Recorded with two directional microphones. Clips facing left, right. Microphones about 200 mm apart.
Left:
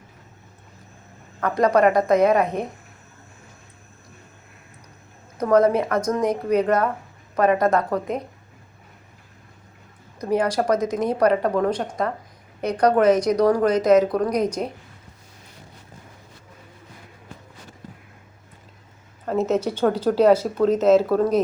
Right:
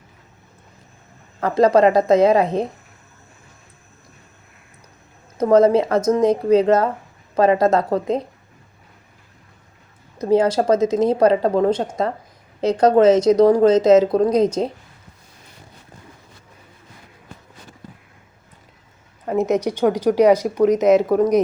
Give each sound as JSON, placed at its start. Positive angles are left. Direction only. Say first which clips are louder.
{"t": 1.4, "sound": "speech", "louder": "right 4 dB", "side_deg": -25}
{"t": 5.4, "sound": "speech", "louder": "right 4 dB", "side_deg": -25}
{"t": 10.2, "sound": "speech", "louder": "right 5 dB", "side_deg": -25}
{"t": 19.2, "sound": "speech", "louder": "right 2 dB", "side_deg": -15}